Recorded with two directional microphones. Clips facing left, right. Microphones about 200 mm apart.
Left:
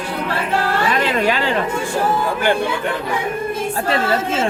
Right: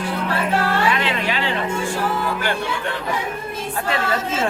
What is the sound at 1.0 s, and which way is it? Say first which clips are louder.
Speech: left 5 dB; 45° left (ahead or behind).